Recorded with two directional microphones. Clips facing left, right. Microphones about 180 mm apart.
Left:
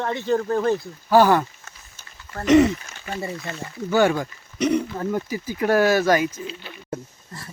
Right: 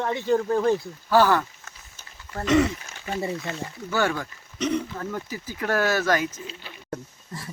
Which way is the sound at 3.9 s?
15° left (ahead or behind).